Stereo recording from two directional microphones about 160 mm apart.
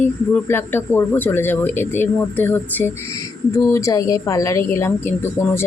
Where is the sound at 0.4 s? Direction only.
15° left (ahead or behind).